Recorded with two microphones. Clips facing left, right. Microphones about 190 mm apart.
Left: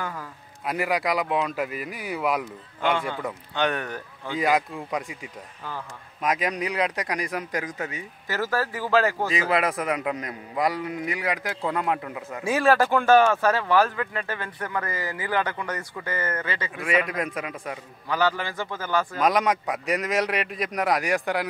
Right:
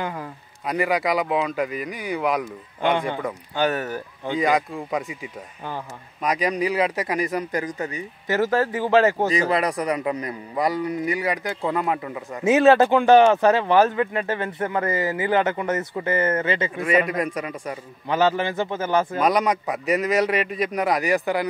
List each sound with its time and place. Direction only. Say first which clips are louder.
0.0 s speech: right 4 dB; 20° right (ahead or behind)
0.7 s a man's voice: right 3 dB; centre (ahead or behind)
2.8 s a man's voice: right 3 dB; 20° right (ahead or behind)
3.2 s a man's voice: right 3 dB; centre (ahead or behind)
8.3 s speech: right 6 dB; 20° right (ahead or behind)
9.3 s a man's voice: right 2 dB; centre (ahead or behind)
12.4 s speech: right 6 dB; 20° right (ahead or behind)
16.7 s a man's voice: right 2 dB; centre (ahead or behind)
18.0 s speech: right 4 dB; 20° right (ahead or behind)
19.1 s a man's voice: right 2 dB; centre (ahead or behind)